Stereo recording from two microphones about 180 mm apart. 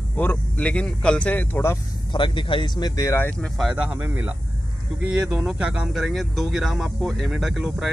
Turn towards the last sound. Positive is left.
turn(degrees=0)  # may be behind; listen again after turning